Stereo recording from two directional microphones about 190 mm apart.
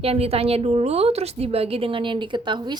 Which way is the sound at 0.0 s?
30° right (ahead or behind).